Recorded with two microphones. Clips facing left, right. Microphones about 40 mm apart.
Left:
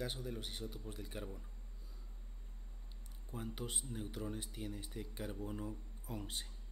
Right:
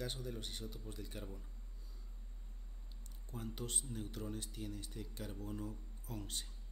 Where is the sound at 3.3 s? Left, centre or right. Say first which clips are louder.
Left 1 dB; centre.